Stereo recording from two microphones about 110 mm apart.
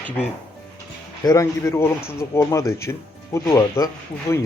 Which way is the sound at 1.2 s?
30° left (ahead or behind).